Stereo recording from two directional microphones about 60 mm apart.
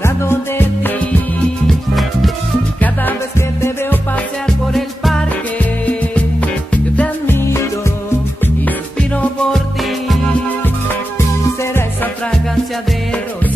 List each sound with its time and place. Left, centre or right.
0.0 s music: left
1.7 s music: centre
2.8 s music: left
4.7 s music: centre
5.6 s music: left
7.2 s music: left